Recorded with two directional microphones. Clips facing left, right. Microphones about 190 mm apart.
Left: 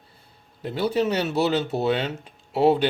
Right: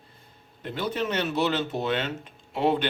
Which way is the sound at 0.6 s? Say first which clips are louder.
Left 6 dB; 35° left (ahead or behind).